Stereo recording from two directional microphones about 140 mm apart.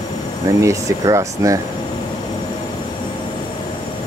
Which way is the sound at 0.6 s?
20° right (ahead or behind).